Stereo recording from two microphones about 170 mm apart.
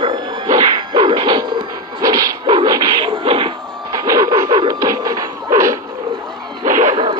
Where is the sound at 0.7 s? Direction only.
25° right (ahead or behind).